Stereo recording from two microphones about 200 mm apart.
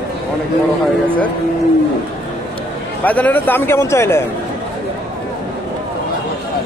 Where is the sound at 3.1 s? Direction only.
10° left (ahead or behind).